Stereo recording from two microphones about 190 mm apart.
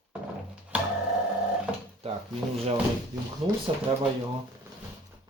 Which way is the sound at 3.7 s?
30° right (ahead or behind).